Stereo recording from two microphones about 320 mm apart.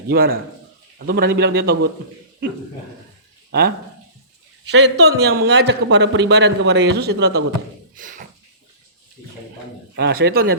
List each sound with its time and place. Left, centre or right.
0.1 s a man's voice: right
3.5 s a man's voice: right
4.7 s a man's voice: right
7.9 s a sound: right
9.9 s a man's voice: right